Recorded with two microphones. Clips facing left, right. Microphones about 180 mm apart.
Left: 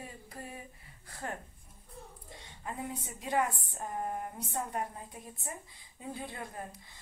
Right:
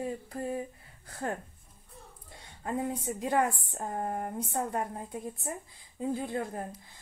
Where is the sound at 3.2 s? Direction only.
50° right (ahead or behind).